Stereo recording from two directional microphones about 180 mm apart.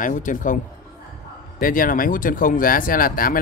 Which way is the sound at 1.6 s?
50° left (ahead or behind).